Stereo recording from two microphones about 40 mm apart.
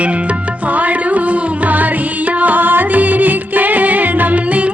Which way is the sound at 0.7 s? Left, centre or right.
Right.